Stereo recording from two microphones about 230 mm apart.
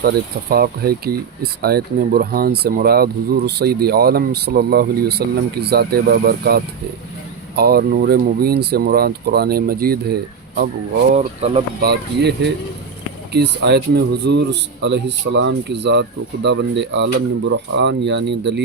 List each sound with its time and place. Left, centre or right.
0.5 s speech: right
11.1 s speech: right
11.8 s speech: right